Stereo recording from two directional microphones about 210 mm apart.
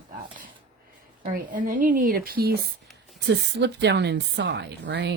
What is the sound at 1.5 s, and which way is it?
A woman's voice, 40° right (ahead or behind).